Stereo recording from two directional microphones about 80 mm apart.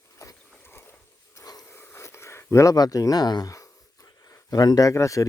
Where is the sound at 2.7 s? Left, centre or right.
Left.